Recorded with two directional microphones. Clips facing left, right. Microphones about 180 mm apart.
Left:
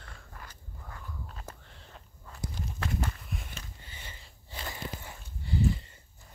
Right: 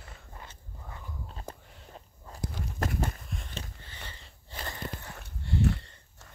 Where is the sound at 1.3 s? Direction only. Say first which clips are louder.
Right 3 dB; 35° right (ahead or behind).